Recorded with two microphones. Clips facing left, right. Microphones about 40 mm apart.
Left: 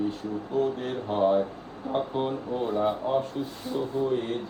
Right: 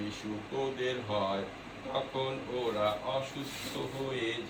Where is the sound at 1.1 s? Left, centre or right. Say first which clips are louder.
Left 9 dB; right.